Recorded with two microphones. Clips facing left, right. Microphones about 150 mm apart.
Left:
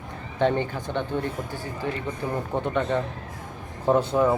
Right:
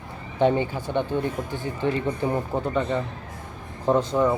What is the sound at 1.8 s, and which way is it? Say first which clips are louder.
Speech: right 6 dB; 30° right (ahead or behind).